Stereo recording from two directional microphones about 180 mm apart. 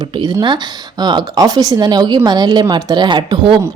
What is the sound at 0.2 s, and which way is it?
Speech, 25° right (ahead or behind).